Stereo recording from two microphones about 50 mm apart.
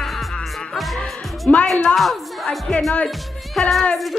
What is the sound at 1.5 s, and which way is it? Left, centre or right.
Speech, left.